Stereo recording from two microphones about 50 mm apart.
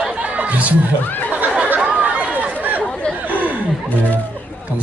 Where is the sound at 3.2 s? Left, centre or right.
Right.